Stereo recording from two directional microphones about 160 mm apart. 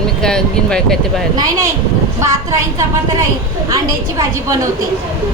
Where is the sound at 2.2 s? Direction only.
20° right (ahead or behind).